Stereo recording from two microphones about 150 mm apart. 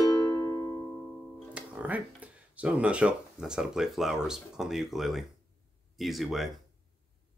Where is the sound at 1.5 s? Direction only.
10° right (ahead or behind).